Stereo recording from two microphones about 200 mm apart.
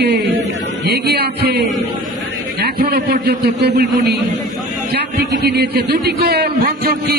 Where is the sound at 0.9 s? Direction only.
55° right (ahead or behind).